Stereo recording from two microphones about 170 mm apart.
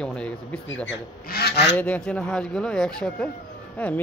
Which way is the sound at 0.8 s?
75° left (ahead or behind).